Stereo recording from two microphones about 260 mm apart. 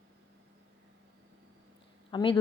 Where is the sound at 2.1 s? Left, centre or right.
Centre.